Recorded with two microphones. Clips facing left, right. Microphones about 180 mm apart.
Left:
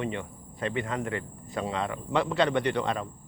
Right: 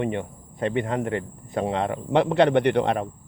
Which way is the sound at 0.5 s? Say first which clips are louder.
Right 6 dB; 20° right (ahead or behind).